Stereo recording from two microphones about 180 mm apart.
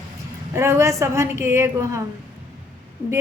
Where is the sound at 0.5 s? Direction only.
15° right (ahead or behind).